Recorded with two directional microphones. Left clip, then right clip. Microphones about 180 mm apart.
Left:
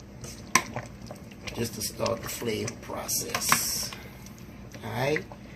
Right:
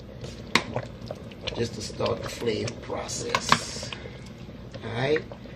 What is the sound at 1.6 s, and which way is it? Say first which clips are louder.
Speech: right 1 dB; 25° left (ahead or behind).